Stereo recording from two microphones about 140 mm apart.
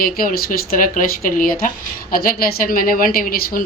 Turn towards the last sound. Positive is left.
turn(degrees=90)